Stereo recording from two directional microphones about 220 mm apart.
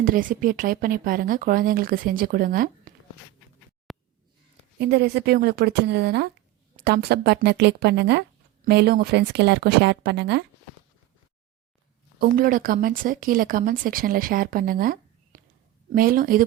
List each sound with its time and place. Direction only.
0.0 s speech: 40° right (ahead or behind)
3.9 s a sound: centre (ahead or behind)
4.8 s a woman's voice: 45° right (ahead or behind)
12.2 s speech: 40° right (ahead or behind)